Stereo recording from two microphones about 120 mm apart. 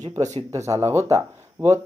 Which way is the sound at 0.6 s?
20° right (ahead or behind).